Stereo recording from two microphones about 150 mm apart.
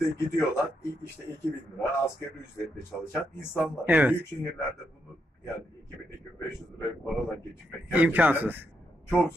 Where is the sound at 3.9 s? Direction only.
10° right (ahead or behind).